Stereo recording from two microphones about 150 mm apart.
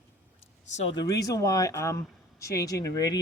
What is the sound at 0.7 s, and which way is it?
Speech, 50° left (ahead or behind).